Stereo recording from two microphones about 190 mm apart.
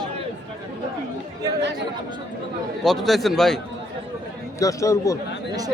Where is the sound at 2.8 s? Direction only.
Centre (ahead or behind).